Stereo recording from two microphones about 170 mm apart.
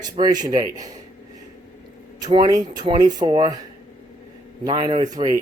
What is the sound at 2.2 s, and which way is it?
Speech, 25° right (ahead or behind).